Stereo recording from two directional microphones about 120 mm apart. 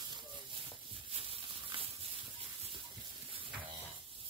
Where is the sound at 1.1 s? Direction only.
55° right (ahead or behind).